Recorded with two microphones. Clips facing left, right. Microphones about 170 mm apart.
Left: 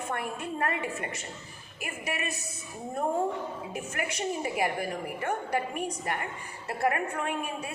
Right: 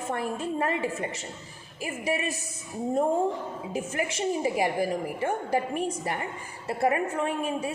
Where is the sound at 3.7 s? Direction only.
25° right (ahead or behind).